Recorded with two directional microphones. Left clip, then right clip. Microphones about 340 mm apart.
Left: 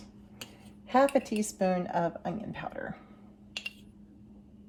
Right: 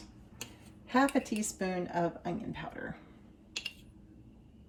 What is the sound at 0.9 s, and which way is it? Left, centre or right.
Speech, left.